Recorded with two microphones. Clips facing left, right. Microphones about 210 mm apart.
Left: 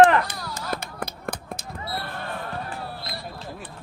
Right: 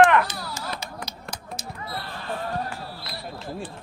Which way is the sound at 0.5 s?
55° left (ahead or behind).